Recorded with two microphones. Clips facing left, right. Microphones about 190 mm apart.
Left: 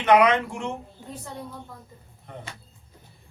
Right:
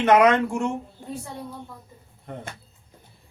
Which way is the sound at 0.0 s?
45° right (ahead or behind).